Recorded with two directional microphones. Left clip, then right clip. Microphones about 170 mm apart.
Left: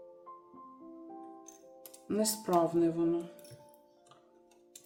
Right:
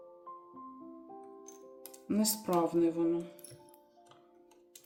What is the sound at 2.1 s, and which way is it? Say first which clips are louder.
Speech: left 2 dB; 20° right (ahead or behind).